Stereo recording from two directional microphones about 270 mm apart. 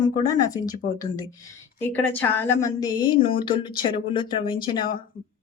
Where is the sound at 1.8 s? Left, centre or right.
Centre.